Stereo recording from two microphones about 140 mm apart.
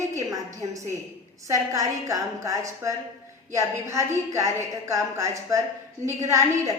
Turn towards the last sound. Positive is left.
turn(degrees=-20)  # may be behind; listen again after turning